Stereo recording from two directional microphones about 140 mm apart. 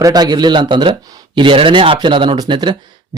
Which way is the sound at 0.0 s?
30° right (ahead or behind).